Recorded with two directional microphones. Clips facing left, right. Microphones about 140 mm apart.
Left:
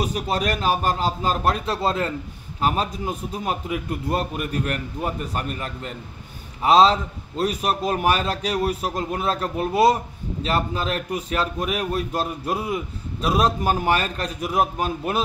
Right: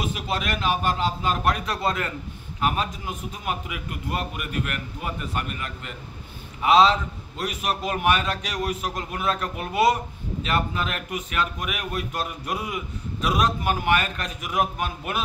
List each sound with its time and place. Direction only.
0.0 s a man's voice: 40° left (ahead or behind)